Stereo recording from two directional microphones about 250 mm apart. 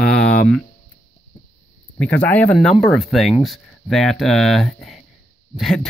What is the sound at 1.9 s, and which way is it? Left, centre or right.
Speech, centre.